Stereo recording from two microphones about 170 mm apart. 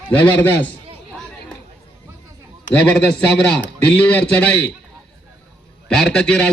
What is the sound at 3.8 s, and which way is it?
Speech, 10° left (ahead or behind).